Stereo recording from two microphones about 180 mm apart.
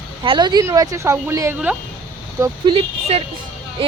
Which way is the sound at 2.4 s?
30° right (ahead or behind).